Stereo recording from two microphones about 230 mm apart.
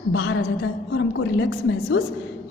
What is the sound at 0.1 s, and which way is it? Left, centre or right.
A woman's voice, left.